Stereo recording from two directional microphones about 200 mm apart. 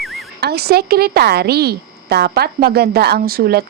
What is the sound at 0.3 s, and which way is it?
A woman's voice, 55° right (ahead or behind).